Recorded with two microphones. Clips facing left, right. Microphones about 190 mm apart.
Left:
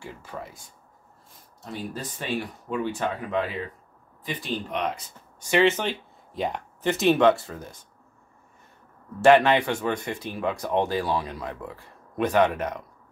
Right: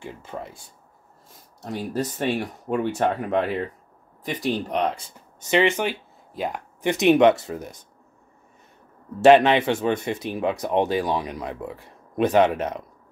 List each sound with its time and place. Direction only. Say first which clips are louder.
0.0 s speech: right 3 dB; 25° right (ahead or behind)
1.6 s speech: right 7 dB; 40° right (ahead or behind)
4.6 s speech: right 4 dB; 35° right (ahead or behind)
5.4 s speech: right 1 dB; 20° right (ahead or behind)
6.8 s speech: right 4 dB; 15° right (ahead or behind)
9.2 s speech: right 3 dB; 20° right (ahead or behind)